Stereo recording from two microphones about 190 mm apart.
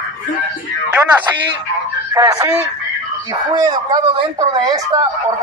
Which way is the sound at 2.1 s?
20° right (ahead or behind).